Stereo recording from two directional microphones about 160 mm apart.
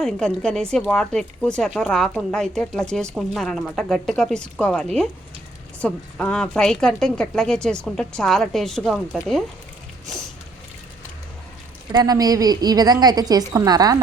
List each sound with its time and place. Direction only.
0.0 s speech: 5° left (ahead or behind)
11.9 s a woman's voice: 25° right (ahead or behind)